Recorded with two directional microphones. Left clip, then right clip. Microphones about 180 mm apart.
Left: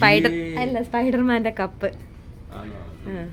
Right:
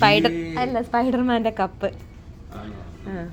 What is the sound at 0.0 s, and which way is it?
A woman's voice, 10° left (ahead or behind).